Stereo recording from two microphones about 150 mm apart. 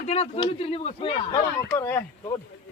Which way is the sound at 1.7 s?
15° left (ahead or behind).